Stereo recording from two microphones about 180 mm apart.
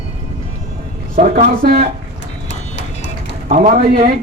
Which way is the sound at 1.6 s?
55° right (ahead or behind).